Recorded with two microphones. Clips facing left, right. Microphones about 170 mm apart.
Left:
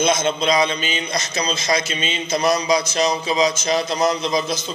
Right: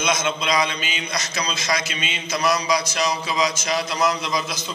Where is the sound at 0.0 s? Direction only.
25° left (ahead or behind).